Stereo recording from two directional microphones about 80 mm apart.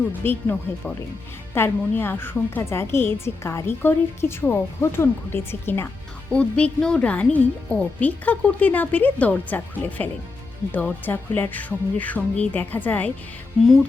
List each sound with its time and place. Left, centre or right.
0.2 s a woman's voice: left
6.3 s a woman's voice: centre